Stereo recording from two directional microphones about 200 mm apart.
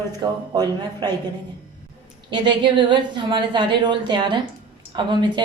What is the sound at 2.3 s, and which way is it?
Speech, 25° right (ahead or behind).